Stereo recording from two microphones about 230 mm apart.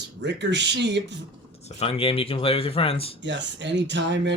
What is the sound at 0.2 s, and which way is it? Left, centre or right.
Speech, right.